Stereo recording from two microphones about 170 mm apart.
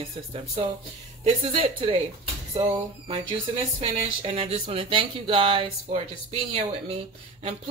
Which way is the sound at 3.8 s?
35° right (ahead or behind).